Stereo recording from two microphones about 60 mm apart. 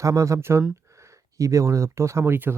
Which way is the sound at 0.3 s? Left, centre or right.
Right.